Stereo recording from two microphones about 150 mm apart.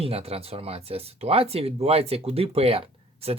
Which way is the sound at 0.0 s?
40° right (ahead or behind).